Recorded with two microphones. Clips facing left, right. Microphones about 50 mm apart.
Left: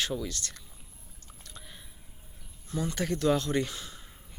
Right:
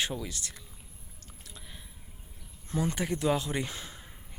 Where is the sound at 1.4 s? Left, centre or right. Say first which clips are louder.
Left 1 dB; centre.